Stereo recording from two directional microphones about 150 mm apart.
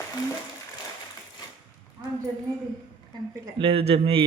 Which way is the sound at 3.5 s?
40° right (ahead or behind).